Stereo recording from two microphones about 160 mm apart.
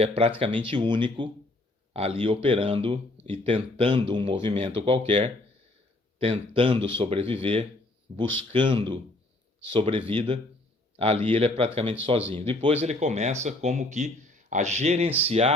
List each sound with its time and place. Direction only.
0.2 s a man's voice: 35° right (ahead or behind)